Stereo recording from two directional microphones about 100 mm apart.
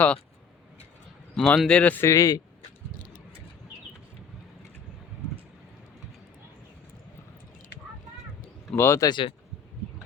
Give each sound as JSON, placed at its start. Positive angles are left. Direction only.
{"t": 1.4, "sound": "speech", "side_deg": 5}
{"t": 2.0, "sound": "speech", "side_deg": 35}
{"t": 8.7, "sound": "speech", "side_deg": 25}
{"t": 9.0, "sound": "speech", "side_deg": 50}